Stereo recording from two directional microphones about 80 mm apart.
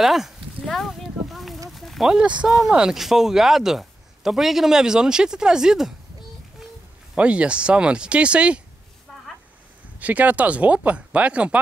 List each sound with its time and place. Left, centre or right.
0.0 s a sound: centre
1.8 s speech: centre
7.2 s speech: centre
9.9 s speech: centre